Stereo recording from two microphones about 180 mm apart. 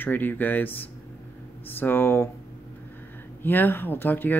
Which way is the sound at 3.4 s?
10° left (ahead or behind).